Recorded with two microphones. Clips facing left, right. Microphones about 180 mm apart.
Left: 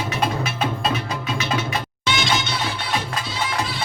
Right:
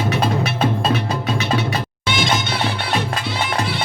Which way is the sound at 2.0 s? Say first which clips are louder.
Right 2 dB; 55° right (ahead or behind).